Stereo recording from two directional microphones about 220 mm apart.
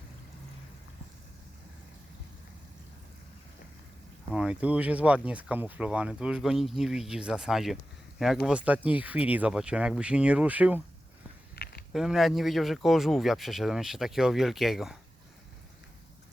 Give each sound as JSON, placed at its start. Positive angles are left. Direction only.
{"t": 4.4, "sound": "speech", "side_deg": -5}
{"t": 11.5, "sound": "a sound", "side_deg": 45}
{"t": 11.9, "sound": "speech", "side_deg": 0}